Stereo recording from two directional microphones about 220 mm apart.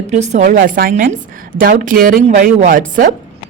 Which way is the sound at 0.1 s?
30° right (ahead or behind).